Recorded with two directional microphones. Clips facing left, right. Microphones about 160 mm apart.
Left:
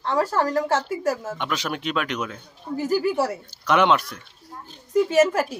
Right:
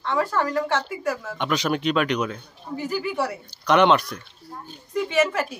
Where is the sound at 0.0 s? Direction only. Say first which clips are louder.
Left 2 dB; 35° left (ahead or behind).